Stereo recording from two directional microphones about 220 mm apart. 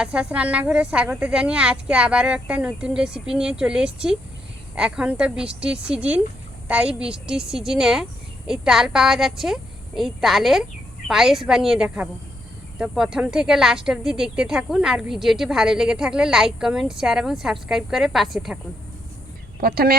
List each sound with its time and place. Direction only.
0.0 s speech: 5° right (ahead or behind)
19.5 s speech: 45° right (ahead or behind)